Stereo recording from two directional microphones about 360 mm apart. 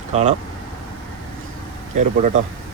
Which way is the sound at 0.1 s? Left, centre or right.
Centre.